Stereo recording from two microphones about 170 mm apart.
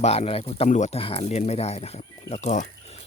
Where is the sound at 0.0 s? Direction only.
35° left (ahead or behind).